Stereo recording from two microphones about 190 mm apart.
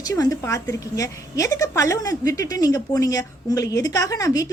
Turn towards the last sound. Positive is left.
turn(degrees=20)  # may be behind; listen again after turning